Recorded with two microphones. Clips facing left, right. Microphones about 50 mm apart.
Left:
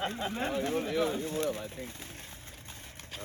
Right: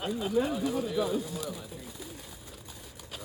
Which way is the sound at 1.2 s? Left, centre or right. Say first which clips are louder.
Left 5 dB; left.